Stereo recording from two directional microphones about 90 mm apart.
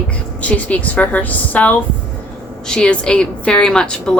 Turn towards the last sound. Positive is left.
turn(degrees=10)  # may be behind; listen again after turning